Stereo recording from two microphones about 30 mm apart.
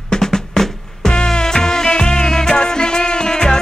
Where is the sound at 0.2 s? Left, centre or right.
Centre.